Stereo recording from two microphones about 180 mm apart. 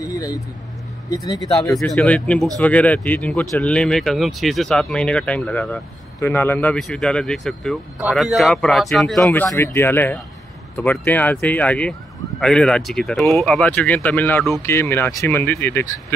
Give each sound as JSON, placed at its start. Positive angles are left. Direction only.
{"t": 0.0, "sound": "speech", "side_deg": 20}
{"t": 1.6, "sound": "speech", "side_deg": 0}